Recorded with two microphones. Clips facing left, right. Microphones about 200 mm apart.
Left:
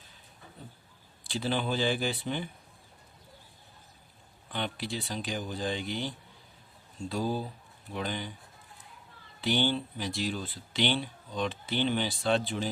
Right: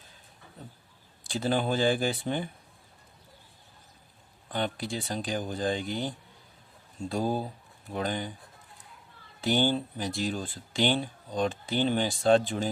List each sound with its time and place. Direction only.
1.3 s speech: 45° right (ahead or behind)
4.4 s speech: 50° right (ahead or behind)
9.4 s speech: 45° right (ahead or behind)